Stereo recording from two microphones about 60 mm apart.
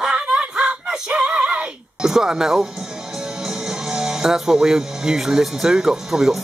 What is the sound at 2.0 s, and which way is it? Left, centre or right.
Speech, centre.